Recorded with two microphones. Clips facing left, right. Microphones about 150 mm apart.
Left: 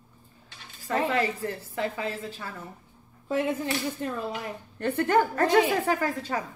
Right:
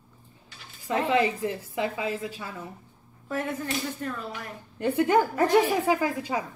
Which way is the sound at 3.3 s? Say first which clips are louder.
Left 3 dB; 20° left (ahead or behind).